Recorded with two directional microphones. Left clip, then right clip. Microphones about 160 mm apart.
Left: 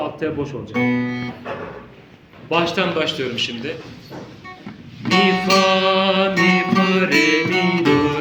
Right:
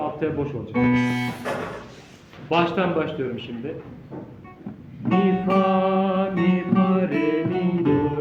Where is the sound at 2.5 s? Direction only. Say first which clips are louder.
Left 2 dB; 20° right (ahead or behind).